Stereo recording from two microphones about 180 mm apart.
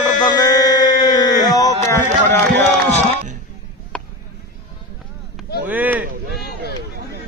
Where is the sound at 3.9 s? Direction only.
5° left (ahead or behind).